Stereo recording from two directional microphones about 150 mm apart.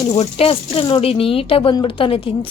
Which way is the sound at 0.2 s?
40° left (ahead or behind).